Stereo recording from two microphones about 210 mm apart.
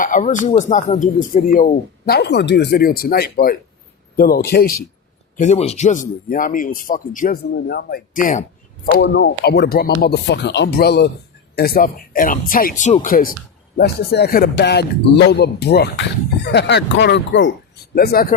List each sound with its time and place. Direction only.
0.0 s speech: 40° left (ahead or behind)
2.0 s speech: 50° left (ahead or behind)
5.4 s speech: 30° left (ahead or behind)
8.9 s speech: 55° left (ahead or behind)
17.9 s speech: 45° left (ahead or behind)